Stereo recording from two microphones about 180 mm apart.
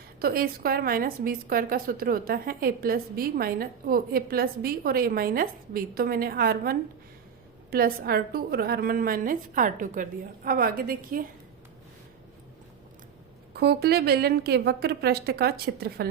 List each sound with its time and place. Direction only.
0.2 s a woman's voice: 55° right (ahead or behind)
13.5 s a woman's voice: 60° right (ahead or behind)